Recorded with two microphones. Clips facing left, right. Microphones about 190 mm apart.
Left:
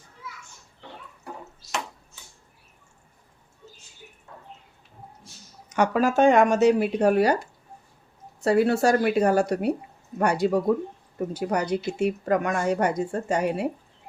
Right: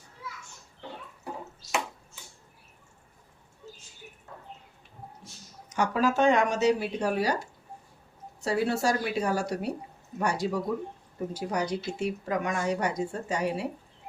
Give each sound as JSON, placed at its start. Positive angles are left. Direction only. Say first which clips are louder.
{"t": 5.6, "sound": "speech", "louder": "left 4 dB", "side_deg": 65}
{"t": 8.4, "sound": "speech", "louder": "left 7 dB", "side_deg": 55}